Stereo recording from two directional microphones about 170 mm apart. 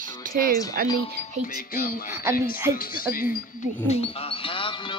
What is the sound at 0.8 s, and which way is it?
Speech, 60° right (ahead or behind).